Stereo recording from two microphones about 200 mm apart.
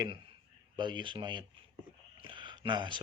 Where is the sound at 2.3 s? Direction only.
25° right (ahead or behind).